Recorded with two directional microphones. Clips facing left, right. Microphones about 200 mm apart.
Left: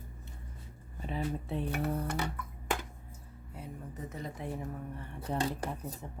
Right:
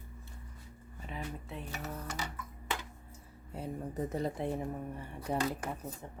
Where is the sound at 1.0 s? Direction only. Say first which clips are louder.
Left 7 dB; 30° left (ahead or behind).